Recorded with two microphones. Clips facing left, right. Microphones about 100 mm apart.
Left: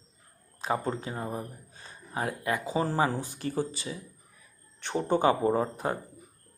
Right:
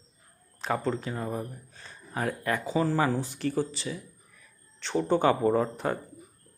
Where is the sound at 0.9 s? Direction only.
25° left (ahead or behind).